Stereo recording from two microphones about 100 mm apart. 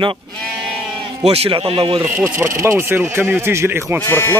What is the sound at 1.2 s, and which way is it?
Speech, 90° right.